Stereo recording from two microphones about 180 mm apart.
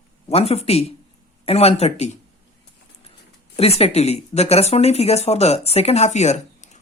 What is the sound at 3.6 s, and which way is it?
Speech, 35° left (ahead or behind).